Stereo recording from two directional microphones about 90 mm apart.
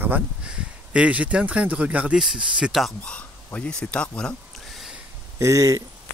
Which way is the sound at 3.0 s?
15° left (ahead or behind).